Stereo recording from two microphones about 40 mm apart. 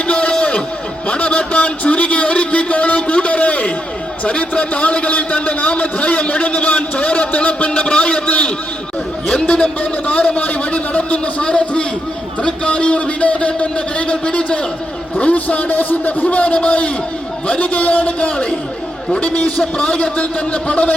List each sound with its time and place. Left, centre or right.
0.1 s a sound: left
4.2 s a man's voice: left
15.2 s a man's voice: left
16.2 s a man's voice: left